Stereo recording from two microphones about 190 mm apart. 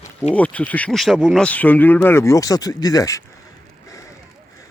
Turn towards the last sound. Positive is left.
turn(degrees=20)  # may be behind; listen again after turning